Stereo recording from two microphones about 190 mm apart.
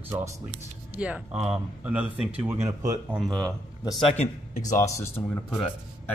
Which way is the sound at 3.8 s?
20° left (ahead or behind).